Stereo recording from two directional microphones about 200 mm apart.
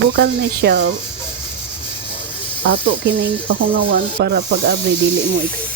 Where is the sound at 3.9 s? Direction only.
50° right (ahead or behind).